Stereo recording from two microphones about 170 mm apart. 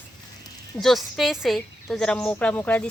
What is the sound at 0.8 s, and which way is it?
Speech, centre (ahead or behind).